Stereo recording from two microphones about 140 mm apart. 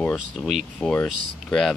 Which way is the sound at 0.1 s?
Centre (ahead or behind).